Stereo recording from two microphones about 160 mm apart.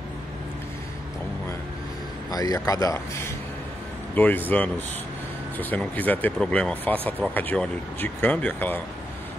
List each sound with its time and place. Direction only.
2.3 s speech: 20° left (ahead or behind)
4.1 s speech: 10° left (ahead or behind)